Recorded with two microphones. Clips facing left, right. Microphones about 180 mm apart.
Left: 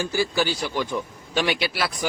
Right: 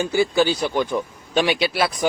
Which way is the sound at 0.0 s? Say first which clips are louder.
Right 5 dB; 20° right (ahead or behind).